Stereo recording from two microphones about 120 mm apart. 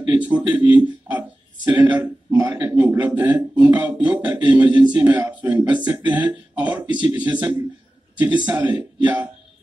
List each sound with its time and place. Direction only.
0.1 s speech: 10° right (ahead or behind)